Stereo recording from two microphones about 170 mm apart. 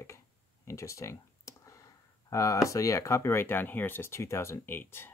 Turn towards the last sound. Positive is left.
turn(degrees=15)  # may be behind; listen again after turning